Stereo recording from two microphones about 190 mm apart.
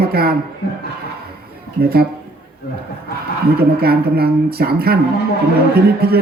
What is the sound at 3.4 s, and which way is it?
Speech, 55° right (ahead or behind).